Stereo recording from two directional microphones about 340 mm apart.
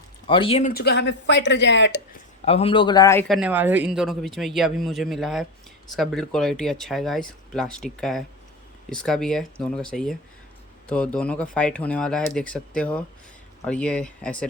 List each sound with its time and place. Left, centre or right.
0.3 s speech: centre; by 2.0 s left
2.4 s a man's voice: centre